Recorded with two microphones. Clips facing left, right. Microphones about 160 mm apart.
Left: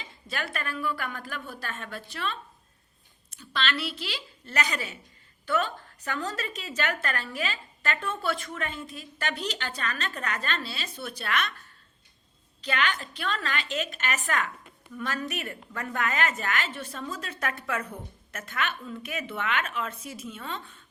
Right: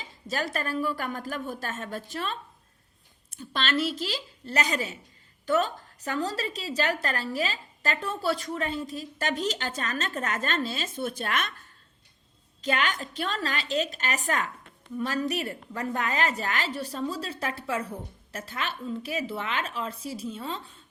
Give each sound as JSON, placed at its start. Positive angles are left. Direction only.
{"t": 0.3, "sound": "a woman's voice", "side_deg": -40}
{"t": 12.6, "sound": "a woman's voice", "side_deg": -40}